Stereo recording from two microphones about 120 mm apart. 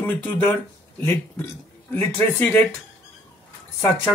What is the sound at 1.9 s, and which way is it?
Speech, 15° left (ahead or behind).